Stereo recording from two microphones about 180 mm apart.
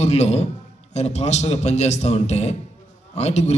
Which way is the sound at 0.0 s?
40° left (ahead or behind).